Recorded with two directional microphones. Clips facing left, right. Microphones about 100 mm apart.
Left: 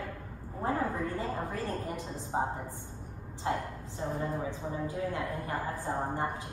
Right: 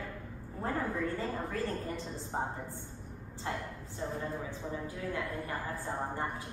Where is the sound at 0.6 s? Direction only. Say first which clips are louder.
Left 2 dB; 15° left (ahead or behind).